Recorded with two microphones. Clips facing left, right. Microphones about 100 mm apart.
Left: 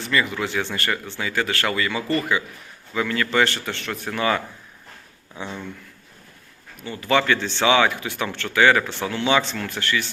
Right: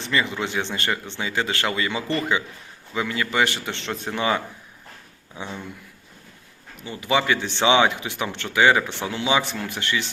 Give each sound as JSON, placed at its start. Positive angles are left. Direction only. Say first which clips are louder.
{"t": 0.0, "sound": "speech", "louder": "left 1 dB", "side_deg": -20}
{"t": 6.7, "sound": "speech", "louder": "left 2 dB", "side_deg": -15}